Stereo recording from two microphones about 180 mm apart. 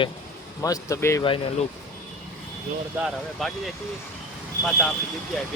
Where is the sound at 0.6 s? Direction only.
20° left (ahead or behind).